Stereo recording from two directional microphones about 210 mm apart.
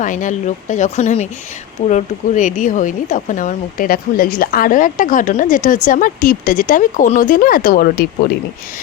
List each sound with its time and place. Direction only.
0.0 s speech: 35° left (ahead or behind)